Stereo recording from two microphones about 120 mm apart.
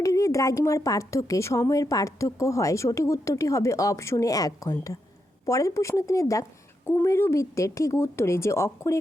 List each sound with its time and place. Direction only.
0.0 s speech: 25° left (ahead or behind)